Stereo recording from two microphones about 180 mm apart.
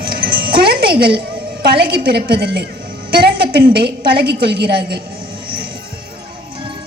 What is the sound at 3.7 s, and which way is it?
A man's voice, 65° right (ahead or behind).